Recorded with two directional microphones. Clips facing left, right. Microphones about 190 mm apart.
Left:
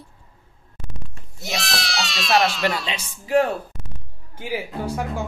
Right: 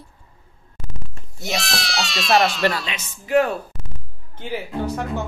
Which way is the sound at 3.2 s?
30° left (ahead or behind).